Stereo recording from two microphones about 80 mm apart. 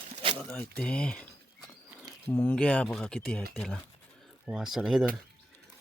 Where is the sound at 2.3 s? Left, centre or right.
Centre.